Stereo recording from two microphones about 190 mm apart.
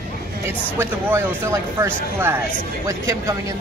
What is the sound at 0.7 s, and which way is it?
Speech, 15° right (ahead or behind).